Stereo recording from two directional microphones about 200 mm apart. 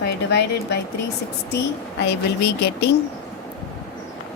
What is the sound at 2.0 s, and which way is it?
Speech, 55° left (ahead or behind).